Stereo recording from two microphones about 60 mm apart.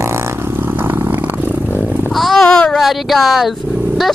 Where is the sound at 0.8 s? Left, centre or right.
Right.